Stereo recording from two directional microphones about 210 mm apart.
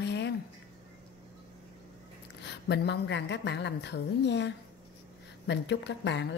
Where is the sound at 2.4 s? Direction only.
55° left (ahead or behind).